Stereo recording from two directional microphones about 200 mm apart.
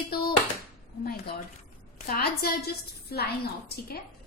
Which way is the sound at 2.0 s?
50° left (ahead or behind).